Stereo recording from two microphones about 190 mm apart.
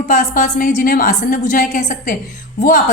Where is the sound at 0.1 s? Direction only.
40° left (ahead or behind).